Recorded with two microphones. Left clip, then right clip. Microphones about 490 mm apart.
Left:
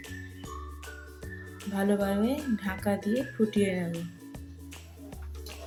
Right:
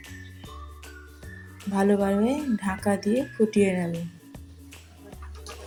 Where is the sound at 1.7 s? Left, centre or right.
Left.